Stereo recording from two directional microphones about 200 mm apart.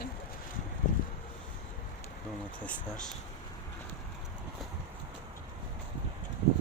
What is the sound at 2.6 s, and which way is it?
Speech, 5° left (ahead or behind).